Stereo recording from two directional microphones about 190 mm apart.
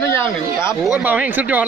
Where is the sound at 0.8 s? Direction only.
5° right (ahead or behind).